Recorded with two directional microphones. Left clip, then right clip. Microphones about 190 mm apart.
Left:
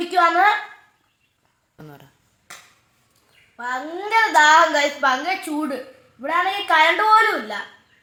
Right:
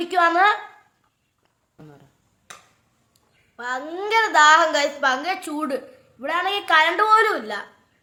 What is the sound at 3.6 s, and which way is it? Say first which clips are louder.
Speech: left 1 dB; 25° right (ahead or behind).